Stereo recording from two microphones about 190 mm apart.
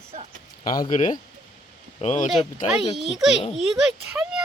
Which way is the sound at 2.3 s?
Centre (ahead or behind).